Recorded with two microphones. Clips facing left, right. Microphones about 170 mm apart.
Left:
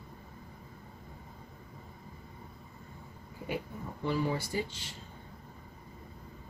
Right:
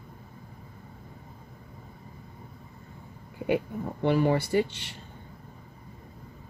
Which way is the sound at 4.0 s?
65° right (ahead or behind).